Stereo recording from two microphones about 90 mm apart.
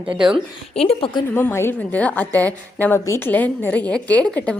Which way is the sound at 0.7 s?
90° left.